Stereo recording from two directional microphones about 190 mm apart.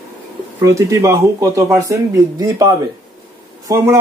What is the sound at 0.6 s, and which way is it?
A man's voice, 15° right (ahead or behind).